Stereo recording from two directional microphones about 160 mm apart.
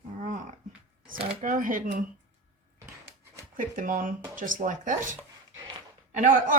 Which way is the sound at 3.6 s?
55° right (ahead or behind).